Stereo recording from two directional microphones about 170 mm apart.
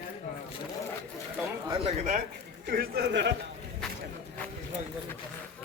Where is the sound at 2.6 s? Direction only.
65° right (ahead or behind); by 3.3 s 90° right.